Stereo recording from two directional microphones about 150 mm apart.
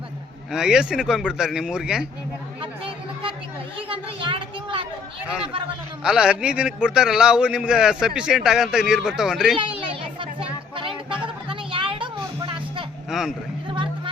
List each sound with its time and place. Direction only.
0.5 s a man's voice: 5° right (ahead or behind)
2.6 s music: 35° right (ahead or behind)
3.8 s speech: 35° right (ahead or behind)
6.0 s a man's voice: 5° right (ahead or behind)
9.6 s a sound: 35° right (ahead or behind)
13.1 s a sound: 5° right (ahead or behind)